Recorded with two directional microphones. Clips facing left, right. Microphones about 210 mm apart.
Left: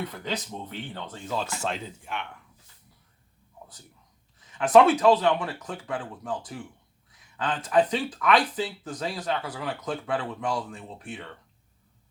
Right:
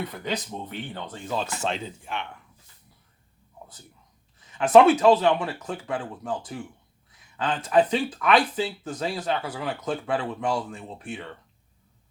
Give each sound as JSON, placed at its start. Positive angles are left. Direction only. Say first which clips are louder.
{"t": 0.1, "sound": "speech", "louder": "right 2 dB", "side_deg": -15}
{"t": 4.5, "sound": "speech", "louder": "right 2 dB", "side_deg": -25}